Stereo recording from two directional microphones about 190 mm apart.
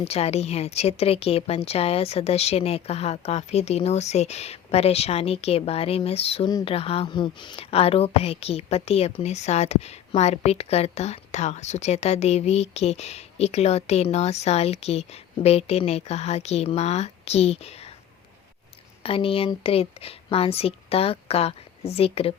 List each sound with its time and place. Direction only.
0.0 s a woman's voice: 30° left (ahead or behind)
19.0 s a woman's voice: 30° left (ahead or behind)